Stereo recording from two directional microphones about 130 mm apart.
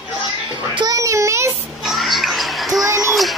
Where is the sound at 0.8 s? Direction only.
25° right (ahead or behind).